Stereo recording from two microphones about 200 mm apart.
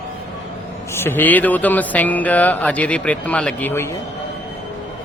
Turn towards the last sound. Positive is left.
turn(degrees=10)  # may be behind; listen again after turning